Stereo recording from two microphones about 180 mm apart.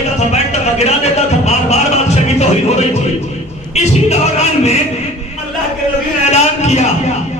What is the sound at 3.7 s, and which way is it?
Speech, 35° left (ahead or behind).